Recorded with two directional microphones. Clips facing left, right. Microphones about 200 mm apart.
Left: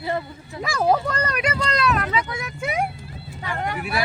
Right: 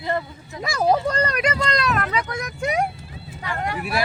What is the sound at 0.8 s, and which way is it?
Speech, 15° right (ahead or behind).